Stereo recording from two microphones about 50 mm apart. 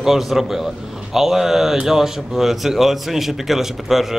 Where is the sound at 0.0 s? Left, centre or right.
Centre.